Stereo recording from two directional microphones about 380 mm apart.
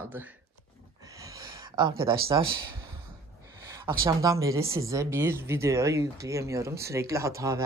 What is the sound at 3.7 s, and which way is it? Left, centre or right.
A woman's voice, centre.